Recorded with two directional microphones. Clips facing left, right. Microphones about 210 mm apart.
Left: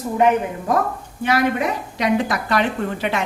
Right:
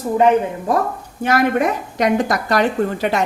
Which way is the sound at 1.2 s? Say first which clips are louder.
Right 3 dB; 45° right (ahead or behind).